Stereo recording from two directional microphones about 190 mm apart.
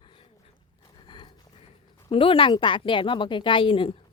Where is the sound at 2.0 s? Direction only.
30° left (ahead or behind).